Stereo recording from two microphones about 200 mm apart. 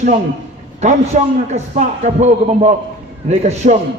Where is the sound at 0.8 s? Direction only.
35° right (ahead or behind).